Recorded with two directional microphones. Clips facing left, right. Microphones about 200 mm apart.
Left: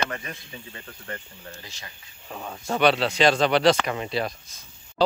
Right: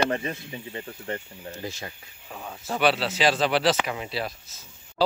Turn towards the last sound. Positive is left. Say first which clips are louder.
# left 2 dB
turn(degrees=-5)  # may be behind; listen again after turning